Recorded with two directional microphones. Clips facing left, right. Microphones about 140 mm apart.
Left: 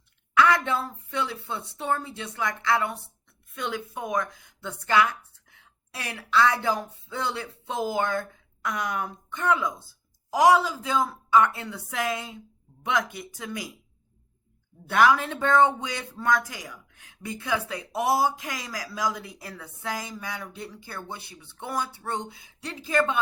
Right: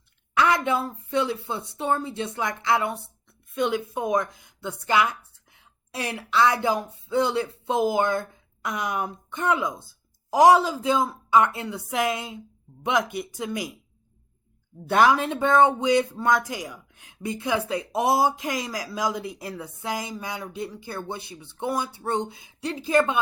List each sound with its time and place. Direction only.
0.3 s a sound: 25° right (ahead or behind)
0.8 s a woman's voice: 20° right (ahead or behind)
14.8 s speech: 25° right (ahead or behind)